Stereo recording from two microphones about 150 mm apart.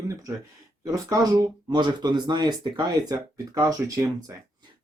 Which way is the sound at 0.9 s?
25° right (ahead or behind).